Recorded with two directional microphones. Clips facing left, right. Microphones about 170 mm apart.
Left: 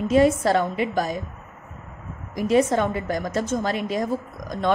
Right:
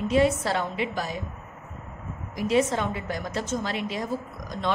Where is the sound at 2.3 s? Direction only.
45° left (ahead or behind).